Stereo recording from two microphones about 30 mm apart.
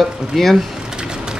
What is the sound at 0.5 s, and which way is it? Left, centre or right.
Speech, centre.